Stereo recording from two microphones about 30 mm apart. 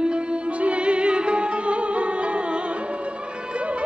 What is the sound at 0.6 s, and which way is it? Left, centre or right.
Music, right.